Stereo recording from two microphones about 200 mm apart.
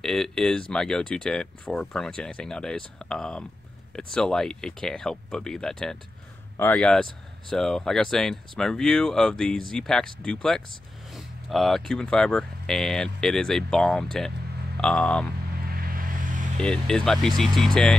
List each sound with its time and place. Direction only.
0.0 s speech: centre (ahead or behind)
15.7 s a sound: 45° right (ahead or behind)
16.5 s speech: 5° left (ahead or behind)